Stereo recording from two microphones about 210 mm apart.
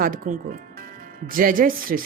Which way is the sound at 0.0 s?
40° right (ahead or behind).